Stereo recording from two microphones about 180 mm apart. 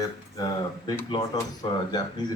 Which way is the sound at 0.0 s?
20° left (ahead or behind).